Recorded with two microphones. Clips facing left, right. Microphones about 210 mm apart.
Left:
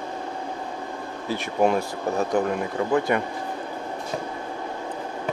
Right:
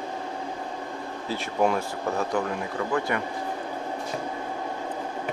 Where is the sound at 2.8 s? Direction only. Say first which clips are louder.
Left 4 dB; 25° left (ahead or behind).